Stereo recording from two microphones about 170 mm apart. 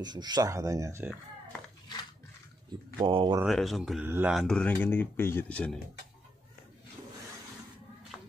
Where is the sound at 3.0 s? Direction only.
30° right (ahead or behind).